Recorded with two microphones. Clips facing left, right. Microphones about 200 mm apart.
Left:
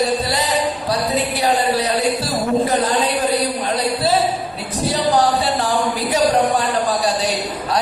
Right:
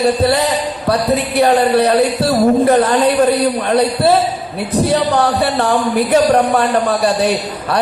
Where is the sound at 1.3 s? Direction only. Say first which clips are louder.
Right 9 dB; 60° right (ahead or behind).